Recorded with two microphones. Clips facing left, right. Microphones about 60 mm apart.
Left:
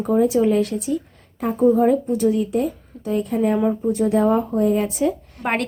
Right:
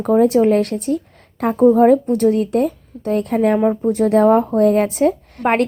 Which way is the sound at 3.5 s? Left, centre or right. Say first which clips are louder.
Right 4 dB; right.